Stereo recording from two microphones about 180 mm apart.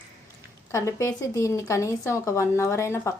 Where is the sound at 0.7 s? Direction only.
15° left (ahead or behind).